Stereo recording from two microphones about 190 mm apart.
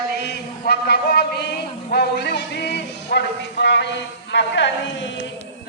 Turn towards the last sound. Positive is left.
turn(degrees=70)  # may be behind; listen again after turning